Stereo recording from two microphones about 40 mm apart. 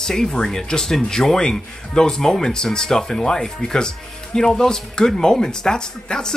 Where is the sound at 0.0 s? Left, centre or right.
Centre.